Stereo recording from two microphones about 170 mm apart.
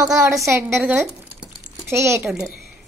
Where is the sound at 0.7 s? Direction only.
5° right (ahead or behind).